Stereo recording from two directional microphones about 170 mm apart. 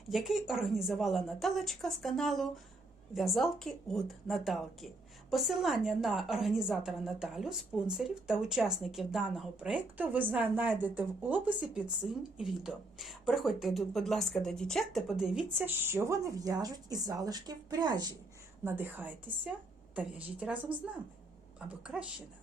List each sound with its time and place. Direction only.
0.1 s a woman's voice: centre (ahead or behind); by 18.1 s 25° right (ahead or behind)
18.6 s speech: 10° right (ahead or behind)
21.8 s a woman's voice: 5° right (ahead or behind)